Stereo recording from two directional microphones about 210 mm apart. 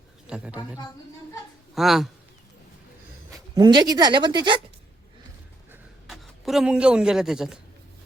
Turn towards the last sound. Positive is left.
turn(degrees=-5)  # may be behind; listen again after turning